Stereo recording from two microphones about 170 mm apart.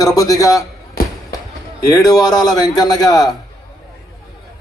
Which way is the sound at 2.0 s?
20° left (ahead or behind).